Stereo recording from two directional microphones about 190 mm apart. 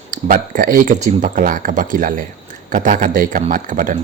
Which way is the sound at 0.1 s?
45° right (ahead or behind).